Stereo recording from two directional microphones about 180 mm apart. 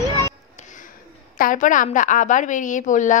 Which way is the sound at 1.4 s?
45° left (ahead or behind).